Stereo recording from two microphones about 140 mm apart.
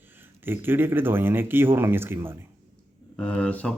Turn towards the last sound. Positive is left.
turn(degrees=10)  # may be behind; listen again after turning